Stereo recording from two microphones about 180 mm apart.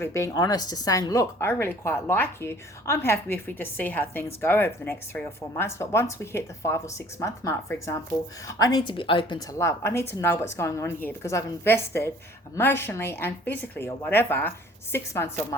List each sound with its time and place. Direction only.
0.0 s speech: 15° left (ahead or behind)